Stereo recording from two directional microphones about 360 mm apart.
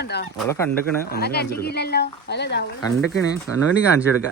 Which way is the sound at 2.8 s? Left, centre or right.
Centre.